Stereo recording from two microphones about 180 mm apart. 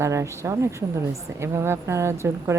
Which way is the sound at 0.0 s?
15° right (ahead or behind).